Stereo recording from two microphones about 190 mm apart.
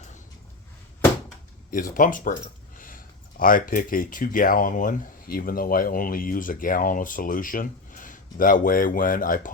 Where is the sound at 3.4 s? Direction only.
45° left (ahead or behind).